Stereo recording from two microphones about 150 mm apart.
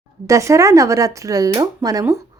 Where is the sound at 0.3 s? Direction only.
20° right (ahead or behind).